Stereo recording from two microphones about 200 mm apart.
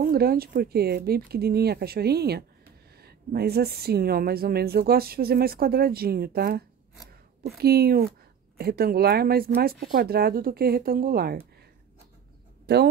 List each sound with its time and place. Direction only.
0.0 s a woman's voice: 50° right (ahead or behind)
12.7 s speech: 55° right (ahead or behind)